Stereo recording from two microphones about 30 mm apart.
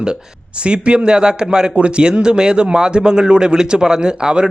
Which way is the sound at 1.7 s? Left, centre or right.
Right.